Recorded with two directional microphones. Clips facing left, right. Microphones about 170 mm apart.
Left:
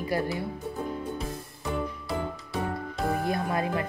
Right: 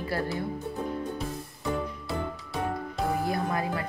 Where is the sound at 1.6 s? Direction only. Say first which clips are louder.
Even; centre (ahead or behind).